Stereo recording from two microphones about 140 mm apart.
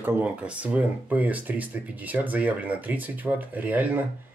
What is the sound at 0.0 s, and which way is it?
Speech, 10° right (ahead or behind).